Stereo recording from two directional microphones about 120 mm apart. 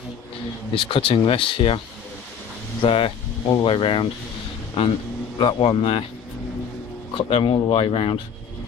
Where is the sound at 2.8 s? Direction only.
45° left (ahead or behind).